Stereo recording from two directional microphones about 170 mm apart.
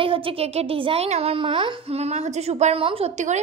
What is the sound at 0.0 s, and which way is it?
A woman's voice, 30° right (ahead or behind).